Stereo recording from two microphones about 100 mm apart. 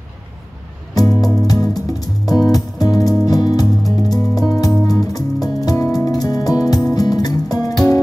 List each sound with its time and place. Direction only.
0.9 s music: 40° left (ahead or behind)